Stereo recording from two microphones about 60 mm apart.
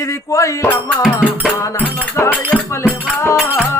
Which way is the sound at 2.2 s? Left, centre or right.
Left.